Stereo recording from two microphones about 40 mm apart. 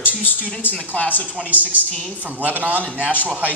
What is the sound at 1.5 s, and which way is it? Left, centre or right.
A woman's voice, right.